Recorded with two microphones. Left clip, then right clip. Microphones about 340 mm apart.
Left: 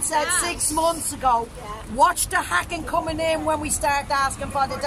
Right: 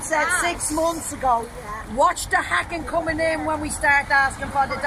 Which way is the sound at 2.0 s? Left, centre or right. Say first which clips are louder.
Even; centre.